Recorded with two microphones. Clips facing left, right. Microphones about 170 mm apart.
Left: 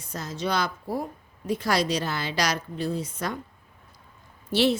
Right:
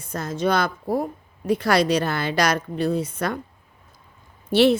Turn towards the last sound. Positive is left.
turn(degrees=-60)  # may be behind; listen again after turning